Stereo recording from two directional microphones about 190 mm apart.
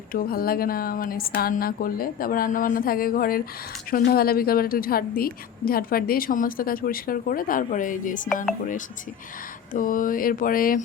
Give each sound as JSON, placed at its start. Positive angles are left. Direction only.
{"t": 0.1, "sound": "a woman's voice", "side_deg": 50}
{"t": 9.7, "sound": "a woman's voice", "side_deg": 45}